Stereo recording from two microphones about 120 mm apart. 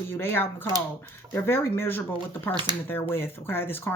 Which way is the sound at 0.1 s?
15° left (ahead or behind).